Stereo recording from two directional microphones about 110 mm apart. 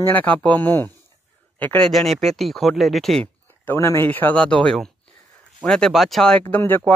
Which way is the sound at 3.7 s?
25° left (ahead or behind).